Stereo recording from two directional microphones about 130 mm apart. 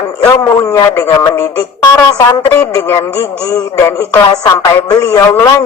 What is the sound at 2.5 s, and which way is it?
A woman's voice, 20° left (ahead or behind).